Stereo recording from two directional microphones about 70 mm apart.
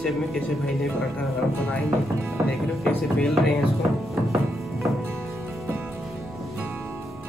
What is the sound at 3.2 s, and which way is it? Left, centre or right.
Speech, centre.